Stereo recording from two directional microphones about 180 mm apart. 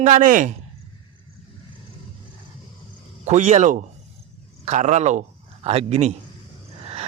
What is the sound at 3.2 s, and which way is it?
A man's voice, 40° right (ahead or behind).